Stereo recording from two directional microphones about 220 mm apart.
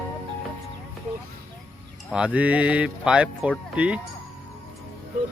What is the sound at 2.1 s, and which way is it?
Speech, 5° right (ahead or behind).